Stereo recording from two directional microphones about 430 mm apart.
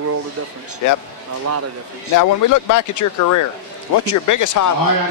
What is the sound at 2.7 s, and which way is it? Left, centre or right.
Speech, left.